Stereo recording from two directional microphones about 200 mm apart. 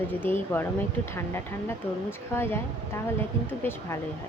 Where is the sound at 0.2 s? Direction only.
10° left (ahead or behind).